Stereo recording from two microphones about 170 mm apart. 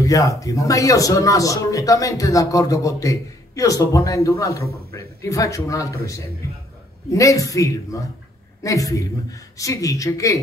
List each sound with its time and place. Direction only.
0.0 s a man's voice: 20° left (ahead or behind)